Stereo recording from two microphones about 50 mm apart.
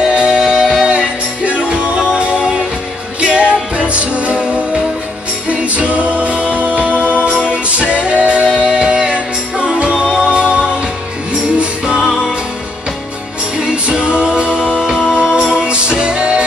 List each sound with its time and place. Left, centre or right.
0.0 s music: centre
11.8 s music: centre
13.6 s music: centre